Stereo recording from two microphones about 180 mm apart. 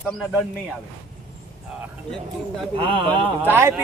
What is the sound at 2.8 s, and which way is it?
Speech, 30° right (ahead or behind).